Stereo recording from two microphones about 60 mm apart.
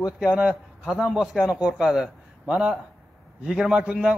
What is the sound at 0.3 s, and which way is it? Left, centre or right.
Speech, centre.